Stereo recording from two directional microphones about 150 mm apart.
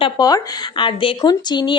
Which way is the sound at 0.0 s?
25° left (ahead or behind).